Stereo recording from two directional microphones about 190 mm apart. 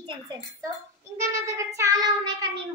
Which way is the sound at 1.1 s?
15° right (ahead or behind).